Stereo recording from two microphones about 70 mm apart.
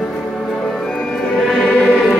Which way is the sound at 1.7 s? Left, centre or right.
Centre.